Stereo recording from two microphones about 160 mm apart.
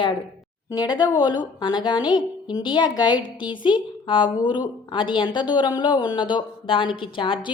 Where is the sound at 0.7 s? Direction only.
25° left (ahead or behind).